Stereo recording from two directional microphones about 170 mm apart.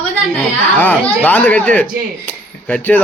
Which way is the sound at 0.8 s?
10° left (ahead or behind).